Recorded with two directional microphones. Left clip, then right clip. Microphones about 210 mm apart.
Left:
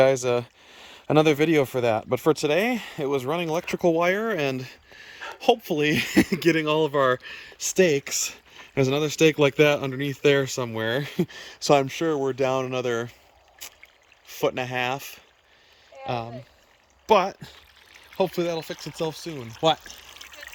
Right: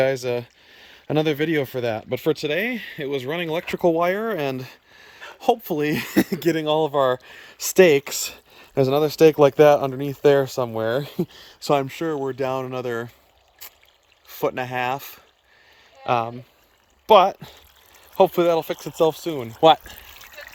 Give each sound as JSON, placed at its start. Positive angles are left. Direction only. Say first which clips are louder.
{"t": 0.0, "sound": "speech", "louder": "left 2 dB", "side_deg": 0}
{"t": 7.6, "sound": "speech", "louder": "right 6 dB", "side_deg": -10}
{"t": 13.6, "sound": "rowboat", "louder": "left 2 dB", "side_deg": 5}
{"t": 14.3, "sound": "speech", "louder": "right 1 dB", "side_deg": 0}
{"t": 19.4, "sound": "speech", "louder": "right 7 dB", "side_deg": -30}
{"t": 19.6, "sound": "speech", "louder": "right 8 dB", "side_deg": -15}
{"t": 20.1, "sound": "water", "louder": "even", "side_deg": 5}